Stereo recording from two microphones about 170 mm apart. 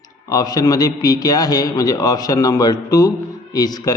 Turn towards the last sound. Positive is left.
turn(degrees=25)  # may be behind; listen again after turning